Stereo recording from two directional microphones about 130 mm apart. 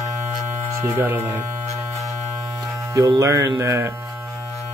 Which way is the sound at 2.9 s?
25° right (ahead or behind).